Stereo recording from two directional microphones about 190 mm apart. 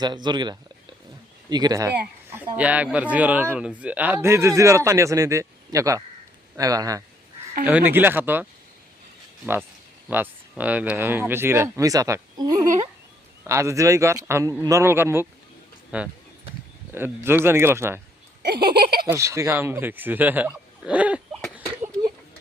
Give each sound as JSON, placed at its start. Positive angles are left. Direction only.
{"t": 0.0, "sound": "a man's voice", "side_deg": -20}
{"t": 9.5, "sound": "a man's voice", "side_deg": -10}
{"t": 12.6, "sound": "speech", "side_deg": -40}
{"t": 13.5, "sound": "a man's voice", "side_deg": -15}
{"t": 18.4, "sound": "a sound", "side_deg": -55}
{"t": 19.0, "sound": "speech", "side_deg": -15}